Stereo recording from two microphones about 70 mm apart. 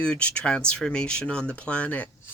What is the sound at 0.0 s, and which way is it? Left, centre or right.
Speech, centre.